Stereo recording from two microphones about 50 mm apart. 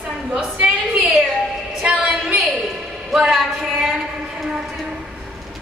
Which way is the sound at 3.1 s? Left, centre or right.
Centre.